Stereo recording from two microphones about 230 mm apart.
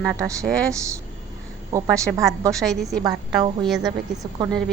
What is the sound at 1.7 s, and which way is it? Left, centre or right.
Speech, centre.